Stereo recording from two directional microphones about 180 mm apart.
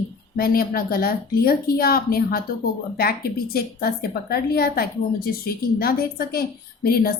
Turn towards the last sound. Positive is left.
turn(degrees=55)  # may be behind; listen again after turning